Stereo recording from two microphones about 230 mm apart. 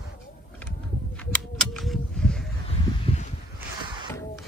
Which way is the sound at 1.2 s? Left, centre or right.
Centre.